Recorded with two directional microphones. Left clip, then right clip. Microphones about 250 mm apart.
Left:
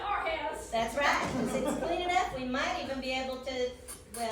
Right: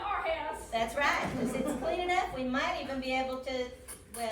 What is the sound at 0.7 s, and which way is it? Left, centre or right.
A woman's voice, centre.